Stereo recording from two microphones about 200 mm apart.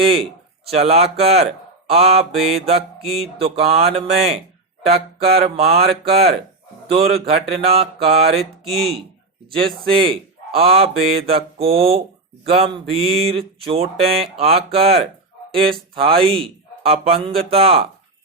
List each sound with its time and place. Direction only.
0.0 s speech: 30° right (ahead or behind)
5.2 s mantra: 50° right (ahead or behind)
5.5 s speech: 30° right (ahead or behind)
6.8 s a sound: 30° right (ahead or behind)
8.3 s speech: 30° right (ahead or behind)
11.3 s a sound: 30° right (ahead or behind)